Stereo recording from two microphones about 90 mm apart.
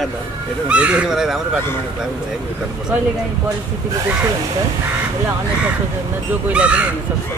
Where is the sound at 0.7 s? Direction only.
15° right (ahead or behind).